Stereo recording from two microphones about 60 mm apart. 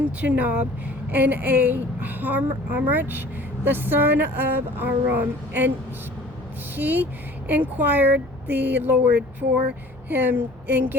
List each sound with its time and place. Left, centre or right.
0.0 s a woman's voice: right
6.7 s a woman's voice: right